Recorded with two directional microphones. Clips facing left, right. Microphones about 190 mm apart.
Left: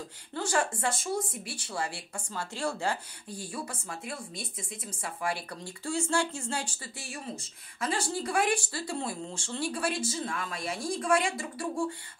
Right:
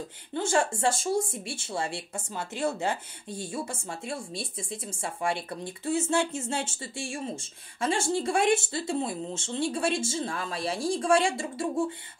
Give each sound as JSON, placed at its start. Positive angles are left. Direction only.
{"t": 0.3, "sound": "speech", "side_deg": -25}